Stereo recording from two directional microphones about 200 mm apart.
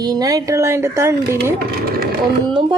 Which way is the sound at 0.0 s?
20° right (ahead or behind).